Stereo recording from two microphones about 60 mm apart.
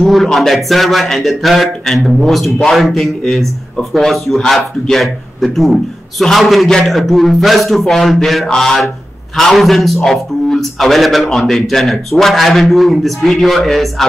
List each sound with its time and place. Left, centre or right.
0.0 s a man's voice: centre